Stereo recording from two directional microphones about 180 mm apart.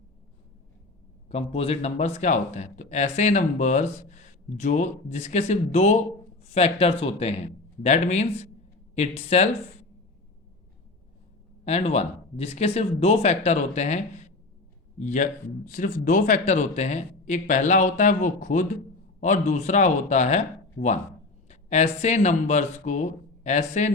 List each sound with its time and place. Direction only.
1.3 s speech: 35° left (ahead or behind)
11.6 s speech: 35° left (ahead or behind)